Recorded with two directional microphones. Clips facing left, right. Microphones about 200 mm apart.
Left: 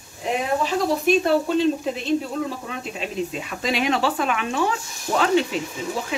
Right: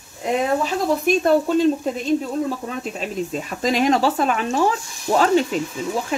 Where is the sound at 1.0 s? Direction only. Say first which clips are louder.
Right 2 dB; 45° right (ahead or behind).